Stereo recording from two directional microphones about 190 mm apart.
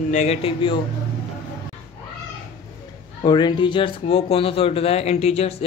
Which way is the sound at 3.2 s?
25° left (ahead or behind).